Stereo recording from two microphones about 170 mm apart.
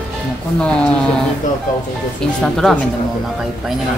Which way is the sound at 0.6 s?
5° left (ahead or behind).